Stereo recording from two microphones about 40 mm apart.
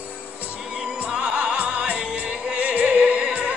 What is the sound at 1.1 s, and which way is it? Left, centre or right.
Music, right.